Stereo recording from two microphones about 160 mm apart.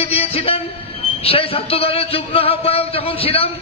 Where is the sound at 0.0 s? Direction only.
40° left (ahead or behind).